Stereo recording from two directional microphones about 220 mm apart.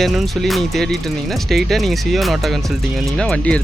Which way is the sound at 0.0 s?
Centre (ahead or behind).